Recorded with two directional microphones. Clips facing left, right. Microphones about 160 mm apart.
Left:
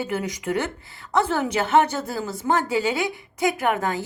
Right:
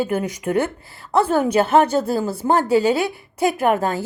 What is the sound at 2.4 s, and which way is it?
A woman's voice, 35° right (ahead or behind).